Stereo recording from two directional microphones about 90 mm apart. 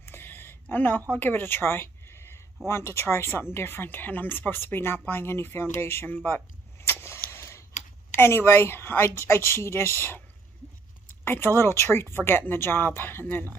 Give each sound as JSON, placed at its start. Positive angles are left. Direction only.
{"t": 0.0, "sound": "a sound", "side_deg": 25}
{"t": 1.1, "sound": "speech", "side_deg": 20}
{"t": 11.2, "sound": "speech", "side_deg": 25}